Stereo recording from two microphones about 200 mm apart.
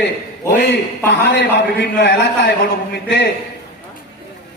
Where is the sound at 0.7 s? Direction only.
60° left (ahead or behind).